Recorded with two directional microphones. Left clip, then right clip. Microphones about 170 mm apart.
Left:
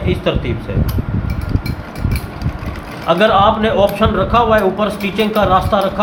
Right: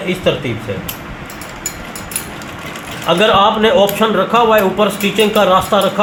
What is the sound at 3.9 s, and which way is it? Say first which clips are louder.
Speech: right 1 dB; 65° right (ahead or behind).